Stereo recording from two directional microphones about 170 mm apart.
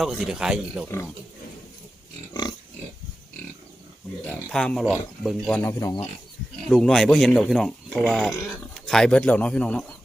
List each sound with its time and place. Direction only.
0.0 s speech: centre (ahead or behind)
0.9 s speech: 15° left (ahead or behind)
2.3 s pig: 25° left (ahead or behind)
4.3 s speech: 5° left (ahead or behind)
5.8 s speech: 25° left (ahead or behind)
6.7 s speech: centre (ahead or behind)